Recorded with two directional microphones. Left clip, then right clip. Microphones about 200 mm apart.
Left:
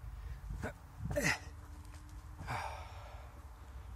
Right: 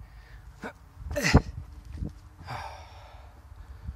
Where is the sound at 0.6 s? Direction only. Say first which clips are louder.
Right 4 dB; 25° right (ahead or behind).